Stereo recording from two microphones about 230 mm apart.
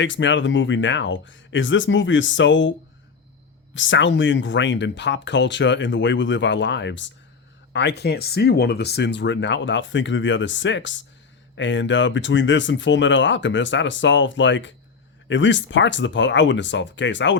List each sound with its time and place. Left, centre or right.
0.0 s speech: left
3.8 s speech: left